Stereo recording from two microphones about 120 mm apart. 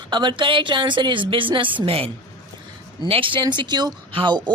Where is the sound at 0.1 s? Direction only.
40° right (ahead or behind).